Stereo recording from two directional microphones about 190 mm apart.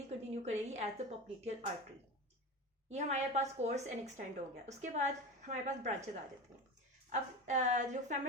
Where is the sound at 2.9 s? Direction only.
40° right (ahead or behind).